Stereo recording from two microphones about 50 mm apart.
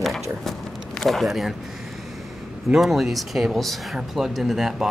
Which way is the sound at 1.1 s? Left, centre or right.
Centre.